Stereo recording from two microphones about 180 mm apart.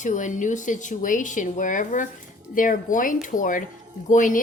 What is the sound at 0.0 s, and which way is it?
A woman's voice, 45° left (ahead or behind).